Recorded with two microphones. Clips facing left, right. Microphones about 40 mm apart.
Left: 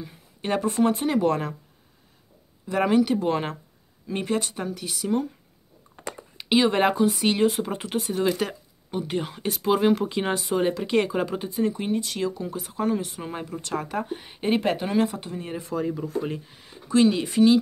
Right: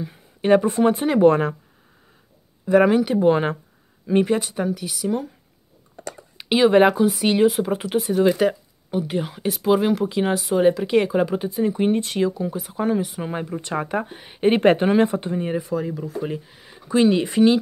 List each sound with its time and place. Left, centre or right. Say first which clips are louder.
0.0 s speech: right 8 dB; centre
1.2 s speech: right 8 dB; right
2.7 s speech: right 5 dB; centre
6.3 s speech: right 5 dB; centre
11.9 s speech: right 4 dB; right
12.2 s speech: right 6 dB; centre
14.6 s speech: right 7 dB; right
15.5 s speech: right 3 dB; centre